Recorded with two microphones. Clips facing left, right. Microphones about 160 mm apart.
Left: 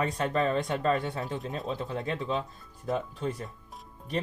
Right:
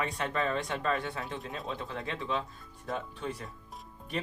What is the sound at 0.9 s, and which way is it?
Speech, 40° left (ahead or behind).